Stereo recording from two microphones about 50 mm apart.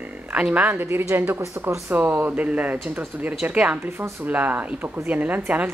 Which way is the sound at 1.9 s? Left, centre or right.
Right.